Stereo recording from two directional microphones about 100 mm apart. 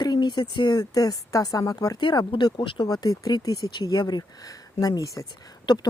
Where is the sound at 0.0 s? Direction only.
45° left (ahead or behind).